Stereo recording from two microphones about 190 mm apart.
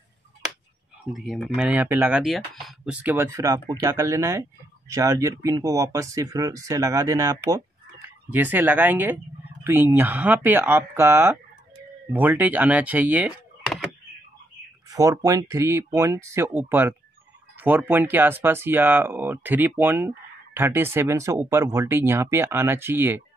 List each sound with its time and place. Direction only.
1.1 s speech: centre (ahead or behind)
14.9 s speech: 20° right (ahead or behind)